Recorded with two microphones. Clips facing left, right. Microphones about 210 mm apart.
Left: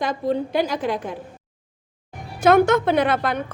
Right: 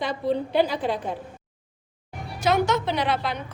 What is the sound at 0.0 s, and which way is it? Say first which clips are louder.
Speech: left 2 dB; 45° left (ahead or behind).